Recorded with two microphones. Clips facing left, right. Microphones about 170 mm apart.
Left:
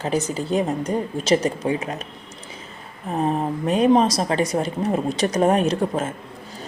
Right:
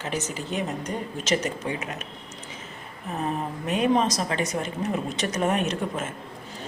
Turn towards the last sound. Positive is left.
turn(degrees=35)  # may be behind; listen again after turning